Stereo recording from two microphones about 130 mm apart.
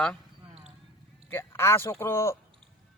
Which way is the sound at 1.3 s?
15° left (ahead or behind).